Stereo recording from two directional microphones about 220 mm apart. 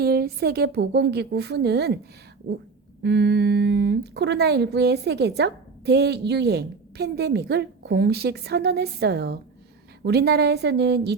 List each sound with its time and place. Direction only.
0.0 s speech: 45° right (ahead or behind)
3.0 s speech: 50° right (ahead or behind)